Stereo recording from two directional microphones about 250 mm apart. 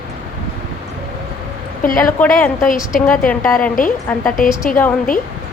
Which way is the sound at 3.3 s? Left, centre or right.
Centre.